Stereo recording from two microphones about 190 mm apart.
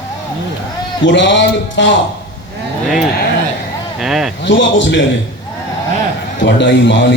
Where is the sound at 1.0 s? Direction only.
70° left (ahead or behind).